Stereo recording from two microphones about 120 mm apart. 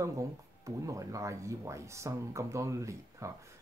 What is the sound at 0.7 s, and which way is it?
Speech, 25° right (ahead or behind).